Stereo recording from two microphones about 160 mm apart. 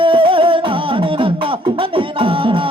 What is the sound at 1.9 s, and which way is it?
Beatboxing, 35° right (ahead or behind).